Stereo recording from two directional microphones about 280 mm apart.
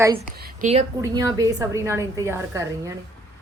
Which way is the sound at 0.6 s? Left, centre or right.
Right.